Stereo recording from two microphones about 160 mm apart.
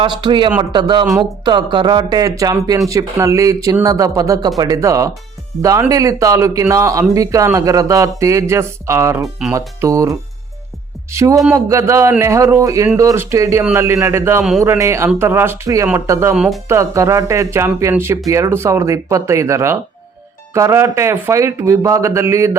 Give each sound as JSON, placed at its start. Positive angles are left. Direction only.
{"t": 0.0, "sound": "speech", "side_deg": -30}
{"t": 16.3, "sound": "speech", "side_deg": -5}
{"t": 16.6, "sound": "speech", "side_deg": -20}